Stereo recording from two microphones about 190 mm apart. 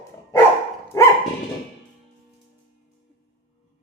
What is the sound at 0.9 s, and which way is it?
Dog, 15° left (ahead or behind).